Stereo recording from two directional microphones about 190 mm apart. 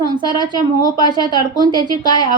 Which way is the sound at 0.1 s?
25° right (ahead or behind).